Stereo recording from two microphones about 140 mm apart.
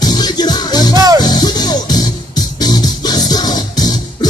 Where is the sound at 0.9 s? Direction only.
25° right (ahead or behind).